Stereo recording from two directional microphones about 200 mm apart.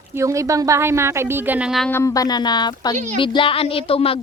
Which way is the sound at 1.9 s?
15° left (ahead or behind).